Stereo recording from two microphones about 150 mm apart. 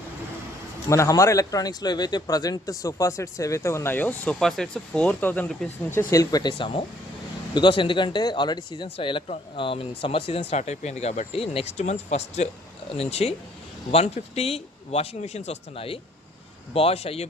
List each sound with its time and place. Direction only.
0.9 s a man's voice: 20° left (ahead or behind)
6.0 s a man's voice: 20° left (ahead or behind); by 17.2 s 45° left (ahead or behind)